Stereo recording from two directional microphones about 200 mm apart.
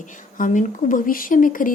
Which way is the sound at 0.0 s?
40° left (ahead or behind).